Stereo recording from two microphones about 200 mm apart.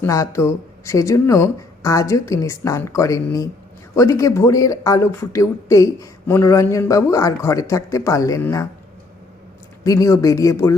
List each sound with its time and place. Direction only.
0.0 s speech: 15° left (ahead or behind)
9.8 s speech: 15° left (ahead or behind)